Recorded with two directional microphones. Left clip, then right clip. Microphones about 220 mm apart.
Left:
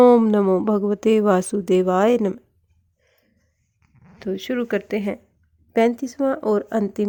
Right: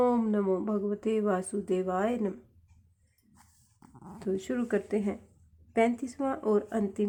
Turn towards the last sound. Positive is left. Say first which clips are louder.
# left 8 dB
turn(degrees=40)  # may be behind; listen again after turning